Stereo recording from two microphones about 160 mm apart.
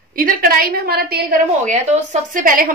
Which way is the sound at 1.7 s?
50° right (ahead or behind).